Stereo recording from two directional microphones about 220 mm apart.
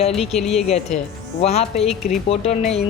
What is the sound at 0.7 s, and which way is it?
Speech, 30° left (ahead or behind).